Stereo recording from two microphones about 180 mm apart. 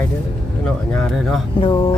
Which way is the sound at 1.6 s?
25° left (ahead or behind).